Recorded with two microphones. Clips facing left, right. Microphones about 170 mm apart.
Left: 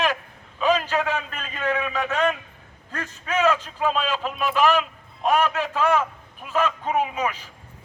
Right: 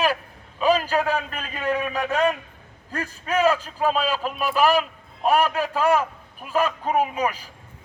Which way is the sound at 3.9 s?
35° right (ahead or behind).